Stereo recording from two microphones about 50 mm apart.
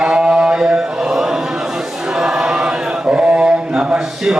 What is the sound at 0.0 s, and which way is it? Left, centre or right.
Chant, centre.